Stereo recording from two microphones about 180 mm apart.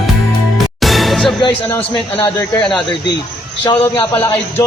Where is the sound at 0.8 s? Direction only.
Centre (ahead or behind).